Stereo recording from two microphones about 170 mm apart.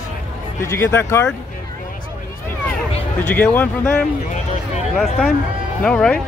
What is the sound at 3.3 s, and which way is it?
Speech, 10° left (ahead or behind).